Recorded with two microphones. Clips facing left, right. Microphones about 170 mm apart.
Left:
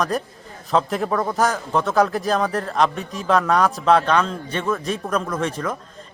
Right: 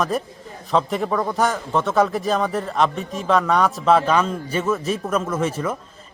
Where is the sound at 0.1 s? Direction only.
Centre (ahead or behind).